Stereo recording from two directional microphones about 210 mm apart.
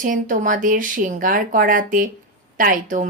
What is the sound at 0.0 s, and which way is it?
Speech, 40° right (ahead or behind).